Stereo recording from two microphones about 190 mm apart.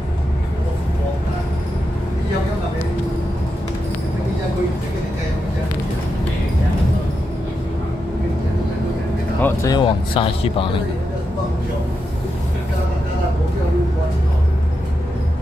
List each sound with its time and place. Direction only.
9.4 s speech: 15° left (ahead or behind)